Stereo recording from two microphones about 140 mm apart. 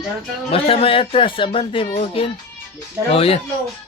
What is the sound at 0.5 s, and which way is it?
A man's voice, 45° left (ahead or behind).